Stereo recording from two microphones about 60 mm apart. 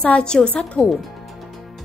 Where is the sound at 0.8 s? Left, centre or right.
Centre.